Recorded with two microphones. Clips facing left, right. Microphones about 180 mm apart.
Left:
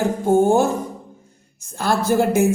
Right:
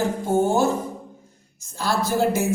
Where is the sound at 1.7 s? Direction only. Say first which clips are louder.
Left 5 dB; 55° left (ahead or behind).